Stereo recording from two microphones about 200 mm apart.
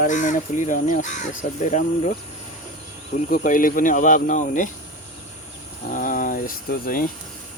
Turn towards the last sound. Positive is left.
turn(degrees=45)  # may be behind; listen again after turning